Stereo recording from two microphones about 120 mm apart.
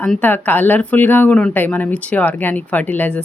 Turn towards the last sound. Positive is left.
turn(degrees=15)  # may be behind; listen again after turning